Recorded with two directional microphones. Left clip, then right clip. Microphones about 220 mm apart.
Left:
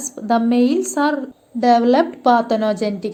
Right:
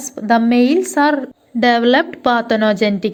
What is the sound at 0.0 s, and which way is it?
A woman's voice, 20° right (ahead or behind).